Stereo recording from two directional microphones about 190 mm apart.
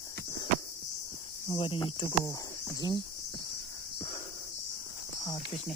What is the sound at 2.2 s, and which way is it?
Speech, 15° left (ahead or behind).